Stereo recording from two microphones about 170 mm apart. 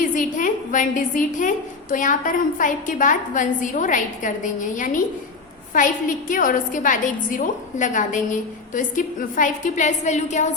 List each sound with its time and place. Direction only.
0.0 s a woman's voice: 50° left (ahead or behind)